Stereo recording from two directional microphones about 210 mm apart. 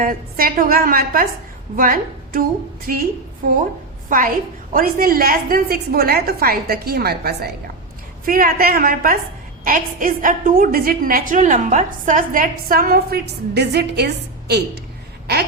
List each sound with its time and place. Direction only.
0.0 s a woman's voice: 45° right (ahead or behind)
4.7 s a woman's voice: 45° right (ahead or behind)